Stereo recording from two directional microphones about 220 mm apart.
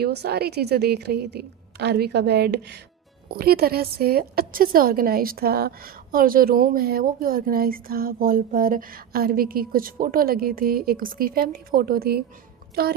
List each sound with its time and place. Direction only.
0.0 s a woman's voice: 45° right (ahead or behind)